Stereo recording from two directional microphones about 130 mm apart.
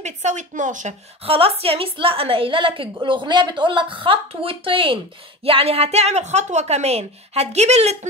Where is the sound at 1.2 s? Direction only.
45° right (ahead or behind).